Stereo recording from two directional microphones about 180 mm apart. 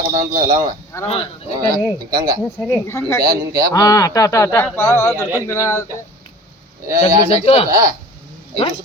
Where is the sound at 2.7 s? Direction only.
15° left (ahead or behind).